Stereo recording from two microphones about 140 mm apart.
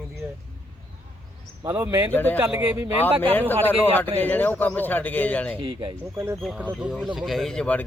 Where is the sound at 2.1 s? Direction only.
15° left (ahead or behind).